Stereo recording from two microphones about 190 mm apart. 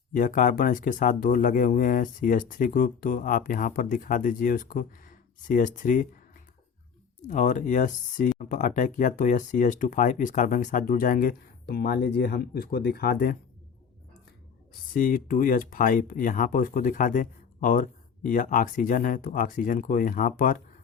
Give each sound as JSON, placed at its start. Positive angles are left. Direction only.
{"t": 0.1, "sound": "speech", "side_deg": 45}
{"t": 7.2, "sound": "speech", "side_deg": 40}
{"t": 14.9, "sound": "speech", "side_deg": 45}